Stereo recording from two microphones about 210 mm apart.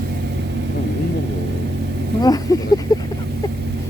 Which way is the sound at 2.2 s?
15° left (ahead or behind).